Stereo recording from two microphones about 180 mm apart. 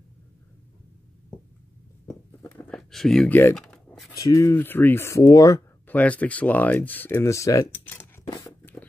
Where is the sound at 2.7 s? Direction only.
Centre (ahead or behind).